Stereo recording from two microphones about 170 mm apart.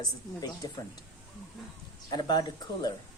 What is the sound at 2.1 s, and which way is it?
Speech, 25° left (ahead or behind).